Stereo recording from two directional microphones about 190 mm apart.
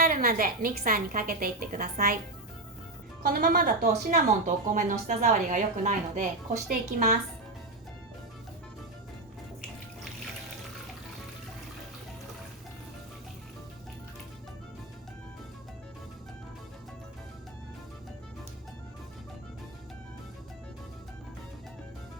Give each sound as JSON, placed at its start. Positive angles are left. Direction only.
{"t": 0.0, "sound": "a woman's voice", "side_deg": -50}
{"t": 3.2, "sound": "a woman's voice", "side_deg": -50}
{"t": 4.1, "sound": "a woman's voice", "side_deg": -40}